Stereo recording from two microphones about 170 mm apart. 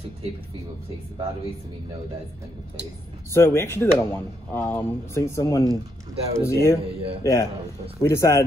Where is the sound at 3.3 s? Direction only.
15° left (ahead or behind).